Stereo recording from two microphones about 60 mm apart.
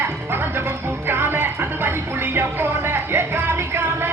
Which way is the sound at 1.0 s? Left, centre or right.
Right.